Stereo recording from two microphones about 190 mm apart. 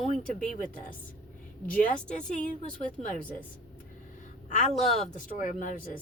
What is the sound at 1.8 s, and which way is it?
Speech, 40° left (ahead or behind).